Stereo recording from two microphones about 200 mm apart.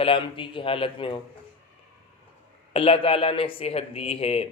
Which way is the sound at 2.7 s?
30° left (ahead or behind).